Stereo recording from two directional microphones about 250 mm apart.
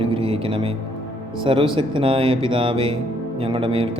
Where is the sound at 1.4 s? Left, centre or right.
Right.